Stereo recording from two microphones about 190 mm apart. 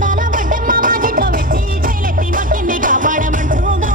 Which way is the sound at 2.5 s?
45° right (ahead or behind).